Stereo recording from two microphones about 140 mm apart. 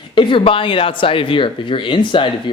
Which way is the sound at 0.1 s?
35° left (ahead or behind).